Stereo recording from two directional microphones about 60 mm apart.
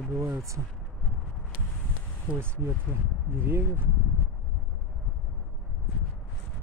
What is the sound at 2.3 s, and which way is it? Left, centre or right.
Speech, right.